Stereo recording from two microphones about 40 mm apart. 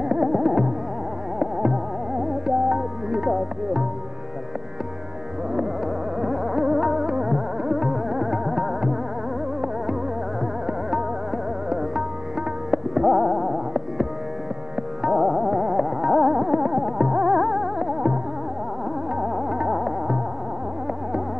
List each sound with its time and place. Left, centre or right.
0.0 s music: centre
3.2 s music: centre
6.2 s music: centre
10.7 s music: centre
12.7 s music: centre
15.0 s music: centre
19.1 s music: centre